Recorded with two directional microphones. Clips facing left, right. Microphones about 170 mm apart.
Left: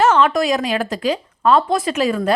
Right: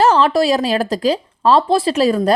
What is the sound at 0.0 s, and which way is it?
Speech, 35° right (ahead or behind).